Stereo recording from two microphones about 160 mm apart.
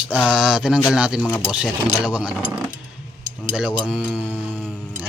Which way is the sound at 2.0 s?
10° right (ahead or behind).